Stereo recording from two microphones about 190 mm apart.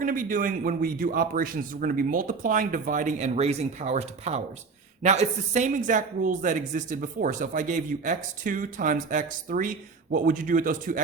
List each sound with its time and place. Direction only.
0.0 s speech: 45° right (ahead or behind)